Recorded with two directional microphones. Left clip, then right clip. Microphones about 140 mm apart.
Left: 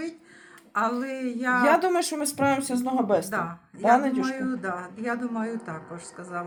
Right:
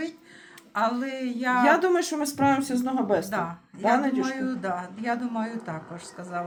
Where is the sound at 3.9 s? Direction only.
40° left (ahead or behind).